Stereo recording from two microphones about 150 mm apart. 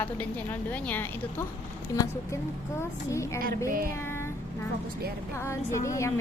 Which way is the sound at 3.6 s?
75° right (ahead or behind).